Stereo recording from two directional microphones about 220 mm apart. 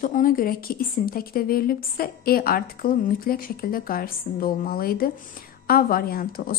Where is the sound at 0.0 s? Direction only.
40° left (ahead or behind).